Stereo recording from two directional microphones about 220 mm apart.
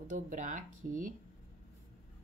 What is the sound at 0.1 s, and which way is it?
Speech, 35° right (ahead or behind).